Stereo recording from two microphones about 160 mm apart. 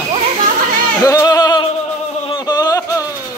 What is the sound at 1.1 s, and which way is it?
Music, 20° left (ahead or behind).